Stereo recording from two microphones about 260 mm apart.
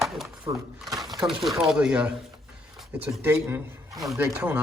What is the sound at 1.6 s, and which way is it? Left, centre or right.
A man's voice, centre.